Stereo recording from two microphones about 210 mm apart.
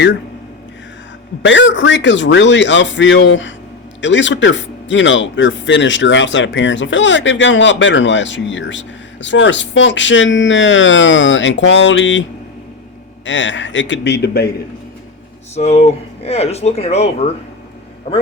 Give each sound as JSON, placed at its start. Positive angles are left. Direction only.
{"t": 1.4, "sound": "speech", "side_deg": 60}
{"t": 13.2, "sound": "speech", "side_deg": 60}
{"t": 15.5, "sound": "speech", "side_deg": 30}